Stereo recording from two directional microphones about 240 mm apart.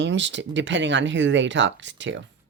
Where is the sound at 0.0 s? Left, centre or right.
Right.